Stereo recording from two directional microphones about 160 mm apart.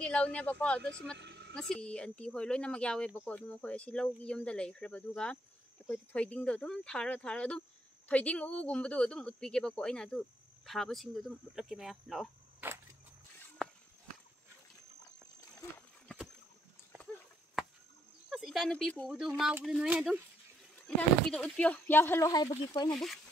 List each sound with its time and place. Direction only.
0.0 s speech: 5° left (ahead or behind)
1.2 s a sound: 90° right
1.5 s speech: 5° left (ahead or behind)
12.5 s cricket: 15° right (ahead or behind)
13.6 s a sound: 5° left (ahead or behind)
18.3 s speech: centre (ahead or behind)
21.3 s speech: 5° left (ahead or behind)
22.8 s speech: centre (ahead or behind)